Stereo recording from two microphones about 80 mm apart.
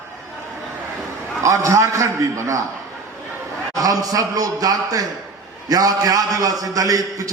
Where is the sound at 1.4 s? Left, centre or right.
Right.